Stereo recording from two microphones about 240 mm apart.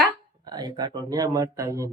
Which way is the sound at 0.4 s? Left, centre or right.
Centre.